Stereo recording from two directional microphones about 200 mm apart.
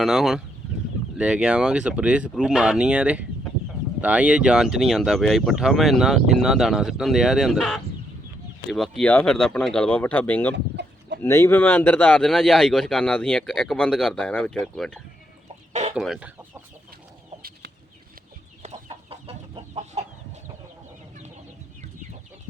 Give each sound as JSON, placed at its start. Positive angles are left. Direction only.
{"t": 0.0, "sound": "speech", "side_deg": 0}
{"t": 10.5, "sound": "chicken", "side_deg": -60}
{"t": 11.2, "sound": "speech", "side_deg": 15}
{"t": 18.6, "sound": "chicken", "side_deg": -30}